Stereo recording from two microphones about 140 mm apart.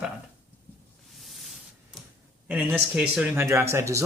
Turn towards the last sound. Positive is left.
turn(degrees=-20)  # may be behind; listen again after turning